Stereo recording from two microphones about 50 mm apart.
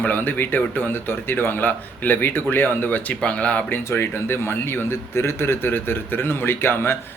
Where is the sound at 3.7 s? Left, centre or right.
Left.